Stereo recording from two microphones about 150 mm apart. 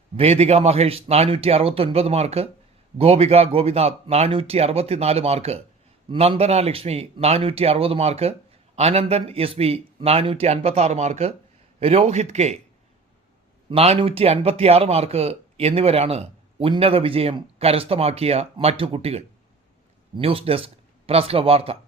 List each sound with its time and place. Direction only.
0.2 s speech: 45° right (ahead or behind)
13.7 s speech: 40° right (ahead or behind)